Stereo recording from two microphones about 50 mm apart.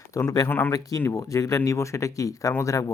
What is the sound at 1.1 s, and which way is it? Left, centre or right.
Speech, left.